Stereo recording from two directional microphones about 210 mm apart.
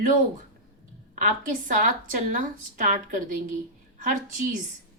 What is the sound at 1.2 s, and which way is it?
Speech, 40° right (ahead or behind).